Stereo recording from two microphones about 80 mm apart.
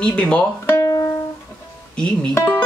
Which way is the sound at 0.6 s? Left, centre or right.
Left.